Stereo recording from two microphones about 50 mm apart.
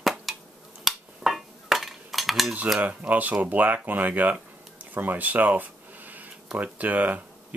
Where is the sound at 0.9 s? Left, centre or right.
Centre.